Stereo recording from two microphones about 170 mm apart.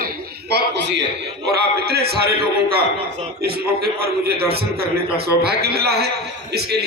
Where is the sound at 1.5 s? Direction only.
70° right (ahead or behind).